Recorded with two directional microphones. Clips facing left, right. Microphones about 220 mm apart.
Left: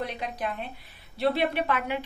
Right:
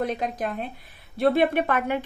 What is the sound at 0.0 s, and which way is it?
A woman's voice, 45° right (ahead or behind).